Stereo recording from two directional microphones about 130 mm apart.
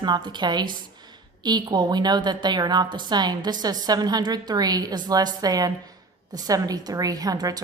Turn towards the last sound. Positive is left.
turn(degrees=-30)  # may be behind; listen again after turning